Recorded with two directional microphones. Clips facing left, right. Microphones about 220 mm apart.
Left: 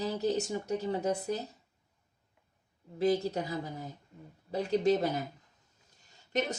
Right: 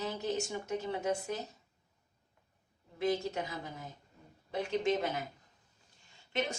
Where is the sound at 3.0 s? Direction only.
35° left (ahead or behind).